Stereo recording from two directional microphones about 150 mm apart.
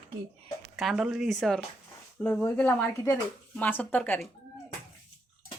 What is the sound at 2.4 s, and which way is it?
Speech, 10° left (ahead or behind).